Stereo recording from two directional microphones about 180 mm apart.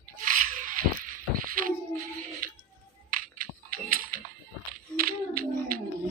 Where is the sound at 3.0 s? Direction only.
50° right (ahead or behind).